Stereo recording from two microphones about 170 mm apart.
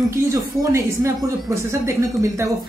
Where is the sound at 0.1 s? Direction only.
20° right (ahead or behind).